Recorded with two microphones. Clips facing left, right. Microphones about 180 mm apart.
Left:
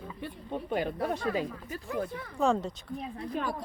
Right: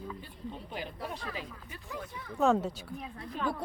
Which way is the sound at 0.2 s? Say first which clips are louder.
Left 6 dB; 55° left (ahead or behind).